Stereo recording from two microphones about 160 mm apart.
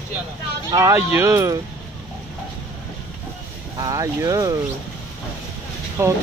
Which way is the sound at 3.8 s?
20° right (ahead or behind).